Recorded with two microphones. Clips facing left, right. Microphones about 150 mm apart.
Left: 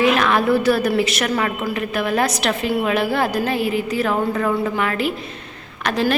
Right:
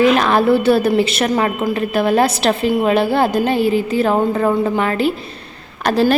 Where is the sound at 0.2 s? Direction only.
30° right (ahead or behind).